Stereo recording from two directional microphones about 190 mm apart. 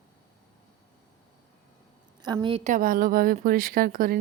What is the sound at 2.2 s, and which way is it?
Speech, 25° right (ahead or behind).